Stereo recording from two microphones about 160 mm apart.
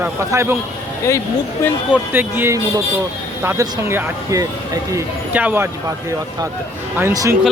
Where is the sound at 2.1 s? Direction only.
10° right (ahead or behind).